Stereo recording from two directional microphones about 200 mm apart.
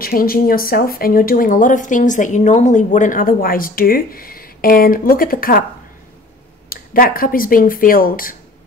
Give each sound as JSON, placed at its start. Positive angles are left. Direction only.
{"t": 0.0, "sound": "speech", "side_deg": 45}
{"t": 6.7, "sound": "speech", "side_deg": 45}